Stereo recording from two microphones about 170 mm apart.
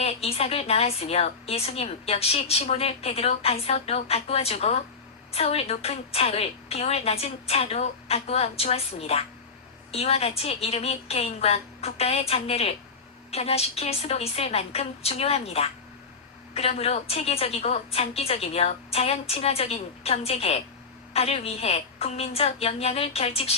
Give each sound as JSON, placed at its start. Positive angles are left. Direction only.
{"t": 0.0, "sound": "a woman's voice", "side_deg": 35}